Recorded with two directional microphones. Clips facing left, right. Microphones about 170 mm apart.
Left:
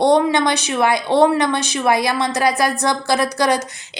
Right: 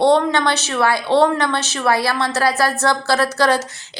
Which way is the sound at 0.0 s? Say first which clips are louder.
Even; 15° left (ahead or behind).